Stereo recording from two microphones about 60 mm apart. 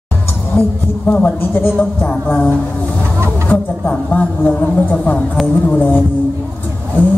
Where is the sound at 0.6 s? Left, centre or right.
Left.